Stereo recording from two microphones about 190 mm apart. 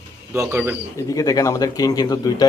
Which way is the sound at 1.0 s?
15° left (ahead or behind).